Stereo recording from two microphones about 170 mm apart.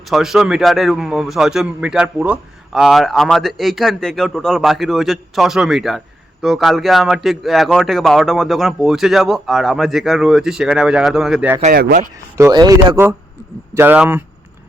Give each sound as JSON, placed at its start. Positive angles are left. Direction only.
{"t": 0.1, "sound": "a man's voice", "side_deg": 0}
{"t": 11.7, "sound": "speech", "side_deg": -65}
{"t": 12.4, "sound": "speech", "side_deg": -20}